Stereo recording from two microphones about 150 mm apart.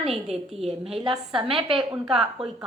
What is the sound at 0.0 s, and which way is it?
Speech, centre (ahead or behind).